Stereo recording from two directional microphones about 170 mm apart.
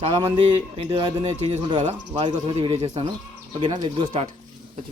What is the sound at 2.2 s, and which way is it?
Speech, 30° right (ahead or behind).